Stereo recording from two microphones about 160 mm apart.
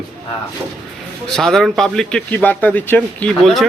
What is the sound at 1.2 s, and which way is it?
A man's voice, 5° left (ahead or behind).